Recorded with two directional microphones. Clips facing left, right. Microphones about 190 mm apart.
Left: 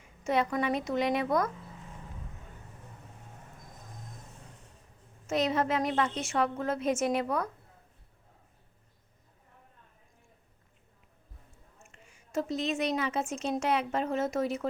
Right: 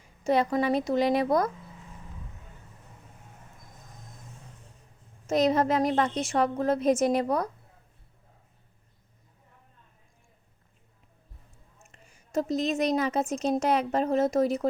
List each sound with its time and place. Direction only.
0.0 s a woman's voice: 35° right (ahead or behind)
5.2 s a woman's voice: 40° right (ahead or behind)
11.9 s a woman's voice: 40° right (ahead or behind)